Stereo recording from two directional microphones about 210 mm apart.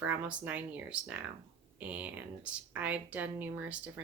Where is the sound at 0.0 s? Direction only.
10° right (ahead or behind).